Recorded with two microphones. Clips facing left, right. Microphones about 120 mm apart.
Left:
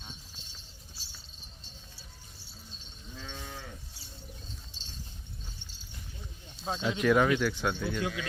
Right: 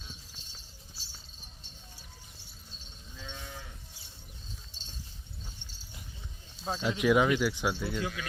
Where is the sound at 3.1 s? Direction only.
50° left (ahead or behind).